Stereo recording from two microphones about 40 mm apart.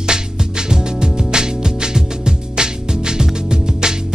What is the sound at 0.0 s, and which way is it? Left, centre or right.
Music, centre.